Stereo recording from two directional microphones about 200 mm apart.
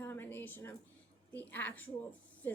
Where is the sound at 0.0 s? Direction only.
10° left (ahead or behind).